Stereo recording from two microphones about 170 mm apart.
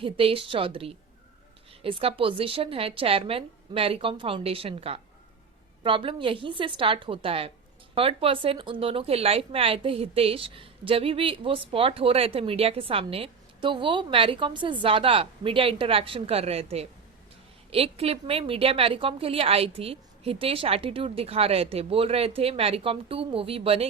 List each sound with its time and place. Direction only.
0.0 s a woman's voice: 35° right (ahead or behind)